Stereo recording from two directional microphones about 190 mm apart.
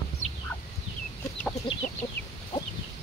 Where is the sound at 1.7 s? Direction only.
80° left.